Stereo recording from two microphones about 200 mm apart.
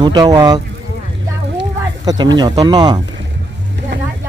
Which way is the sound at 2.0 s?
20° right (ahead or behind).